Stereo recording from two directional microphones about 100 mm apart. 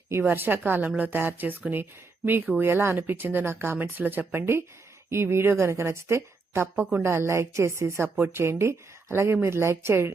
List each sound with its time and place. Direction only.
0.1 s a woman's voice: 20° right (ahead or behind)